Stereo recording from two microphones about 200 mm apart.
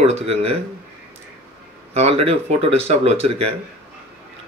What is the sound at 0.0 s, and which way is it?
Speech, 30° right (ahead or behind).